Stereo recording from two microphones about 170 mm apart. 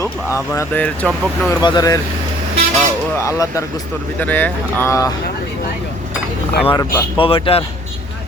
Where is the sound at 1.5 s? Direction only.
25° left (ahead or behind).